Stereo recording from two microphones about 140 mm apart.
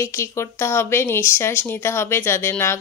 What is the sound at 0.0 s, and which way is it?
Speech, 20° left (ahead or behind).